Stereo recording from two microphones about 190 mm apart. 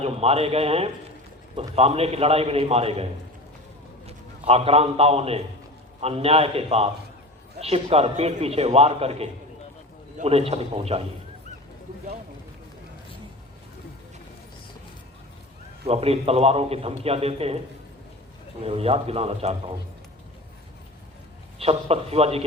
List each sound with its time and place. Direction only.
0.0 s a man's voice: 30° right (ahead or behind)
15.9 s a man's voice: 30° right (ahead or behind)
18.6 s a man's voice: 30° right (ahead or behind)
21.6 s a man's voice: 30° right (ahead or behind)